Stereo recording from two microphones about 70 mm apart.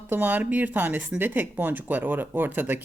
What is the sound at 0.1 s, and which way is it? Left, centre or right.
Speech, right.